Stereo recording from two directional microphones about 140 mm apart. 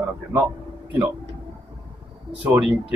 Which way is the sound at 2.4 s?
5° right (ahead or behind).